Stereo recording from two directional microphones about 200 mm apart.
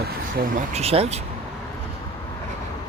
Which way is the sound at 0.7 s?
30° right (ahead or behind).